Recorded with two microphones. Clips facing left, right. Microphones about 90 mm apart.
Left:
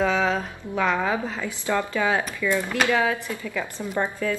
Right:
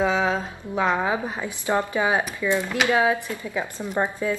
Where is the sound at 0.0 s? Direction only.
20° right (ahead or behind).